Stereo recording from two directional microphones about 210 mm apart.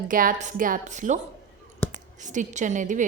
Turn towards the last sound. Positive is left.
turn(degrees=-35)  # may be behind; listen again after turning